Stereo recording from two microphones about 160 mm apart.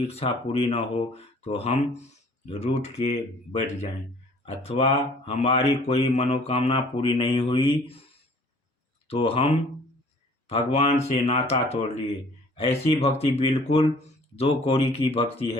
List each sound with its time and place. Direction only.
0.1 s speech: 40° left (ahead or behind)
4.4 s speech: 40° left (ahead or behind)